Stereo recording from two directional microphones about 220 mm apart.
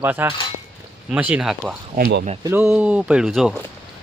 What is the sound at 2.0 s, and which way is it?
Speech, 45° right (ahead or behind).